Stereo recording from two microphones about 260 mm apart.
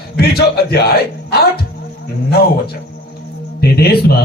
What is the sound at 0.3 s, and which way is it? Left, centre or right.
Speech, left.